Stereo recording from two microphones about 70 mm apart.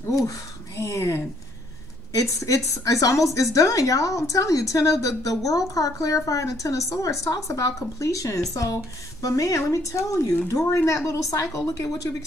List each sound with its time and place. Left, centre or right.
0.7 s a woman's voice: left